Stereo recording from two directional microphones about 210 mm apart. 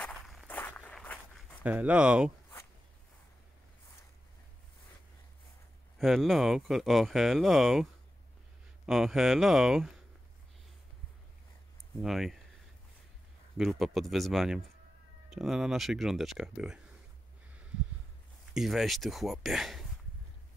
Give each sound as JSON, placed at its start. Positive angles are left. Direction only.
{"t": 0.0, "sound": "walk", "side_deg": 0}
{"t": 1.6, "sound": "speech", "side_deg": -5}
{"t": 5.9, "sound": "speech", "side_deg": 0}
{"t": 12.0, "sound": "speech", "side_deg": 0}
{"t": 13.6, "sound": "speech", "side_deg": 0}
{"t": 18.5, "sound": "speech", "side_deg": 0}